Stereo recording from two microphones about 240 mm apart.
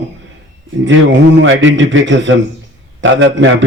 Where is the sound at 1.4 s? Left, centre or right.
Right.